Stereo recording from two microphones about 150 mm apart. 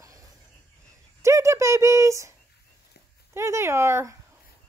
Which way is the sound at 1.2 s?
20° right (ahead or behind).